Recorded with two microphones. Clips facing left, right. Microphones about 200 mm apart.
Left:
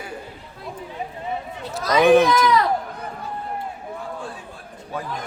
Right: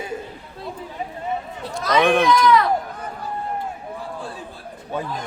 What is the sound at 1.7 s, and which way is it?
Speech, 5° left (ahead or behind).